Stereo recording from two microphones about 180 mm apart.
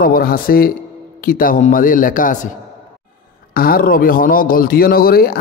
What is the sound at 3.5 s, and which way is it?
A man's voice, 55° left (ahead or behind).